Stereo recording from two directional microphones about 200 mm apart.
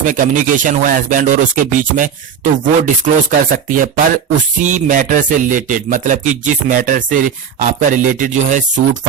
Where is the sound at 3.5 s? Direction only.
40° right (ahead or behind).